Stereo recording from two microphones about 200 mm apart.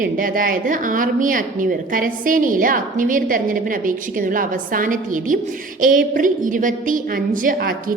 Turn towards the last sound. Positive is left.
turn(degrees=-45)  # may be behind; listen again after turning